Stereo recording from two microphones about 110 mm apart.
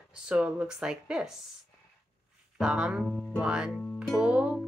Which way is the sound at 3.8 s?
10° left (ahead or behind).